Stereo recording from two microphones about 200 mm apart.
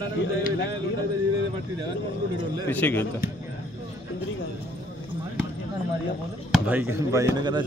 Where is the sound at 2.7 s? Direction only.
10° left (ahead or behind).